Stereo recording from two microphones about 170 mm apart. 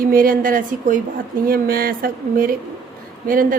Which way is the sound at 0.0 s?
55° right (ahead or behind).